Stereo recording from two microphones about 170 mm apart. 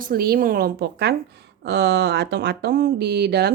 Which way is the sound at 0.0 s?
60° right (ahead or behind).